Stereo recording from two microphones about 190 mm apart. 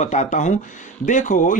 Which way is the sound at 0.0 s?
35° left (ahead or behind).